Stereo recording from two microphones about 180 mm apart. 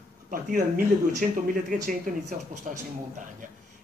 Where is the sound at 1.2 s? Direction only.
50° right (ahead or behind).